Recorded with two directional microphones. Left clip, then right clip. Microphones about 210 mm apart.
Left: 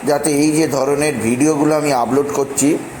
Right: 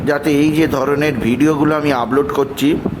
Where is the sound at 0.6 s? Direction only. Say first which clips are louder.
Right 1 dB; 15° right (ahead or behind).